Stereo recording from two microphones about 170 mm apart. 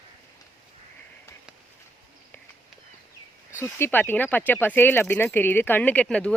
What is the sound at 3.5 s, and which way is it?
Speech, 15° left (ahead or behind).